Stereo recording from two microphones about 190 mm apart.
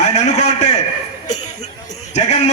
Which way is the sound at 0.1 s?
40° left (ahead or behind).